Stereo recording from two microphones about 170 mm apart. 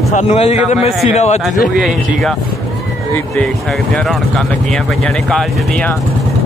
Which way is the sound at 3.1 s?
10° left (ahead or behind).